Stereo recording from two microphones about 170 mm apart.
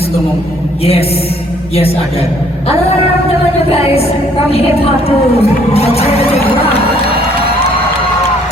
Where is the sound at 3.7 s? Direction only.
35° left (ahead or behind).